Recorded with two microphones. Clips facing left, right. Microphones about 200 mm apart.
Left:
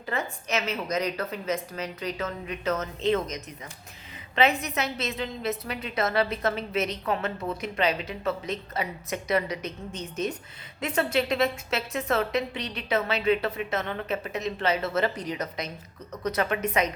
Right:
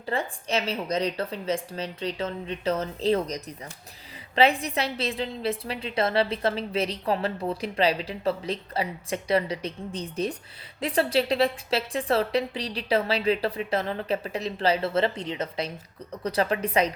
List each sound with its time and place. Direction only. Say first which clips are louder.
0.0 s a woman's voice: right 2 dB; 30° right (ahead or behind)